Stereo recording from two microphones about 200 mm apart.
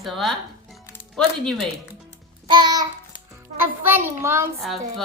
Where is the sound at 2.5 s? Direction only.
20° right (ahead or behind).